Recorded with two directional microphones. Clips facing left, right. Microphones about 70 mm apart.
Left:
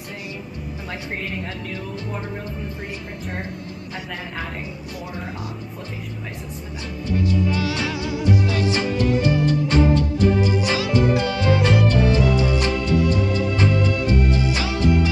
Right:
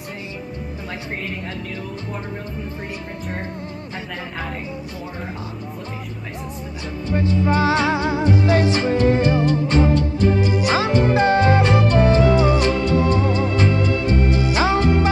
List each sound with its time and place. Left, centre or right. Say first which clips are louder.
7.4 s music: right 6 dB; right